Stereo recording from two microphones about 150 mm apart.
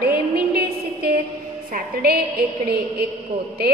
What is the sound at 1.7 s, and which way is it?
A woman's voice, 90° right.